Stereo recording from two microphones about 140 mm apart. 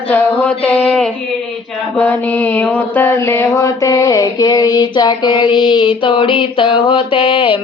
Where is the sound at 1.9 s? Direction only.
10° left (ahead or behind).